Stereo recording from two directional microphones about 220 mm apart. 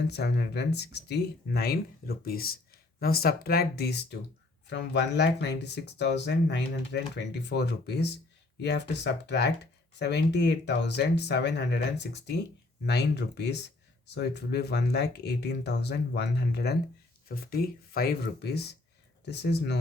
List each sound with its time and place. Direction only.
0.1 s speech: 50° left (ahead or behind)